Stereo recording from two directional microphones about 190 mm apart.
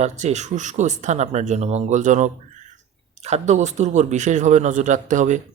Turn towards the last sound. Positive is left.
turn(degrees=-40)  # may be behind; listen again after turning